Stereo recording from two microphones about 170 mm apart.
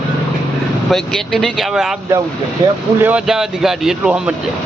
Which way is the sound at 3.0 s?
5° right (ahead or behind).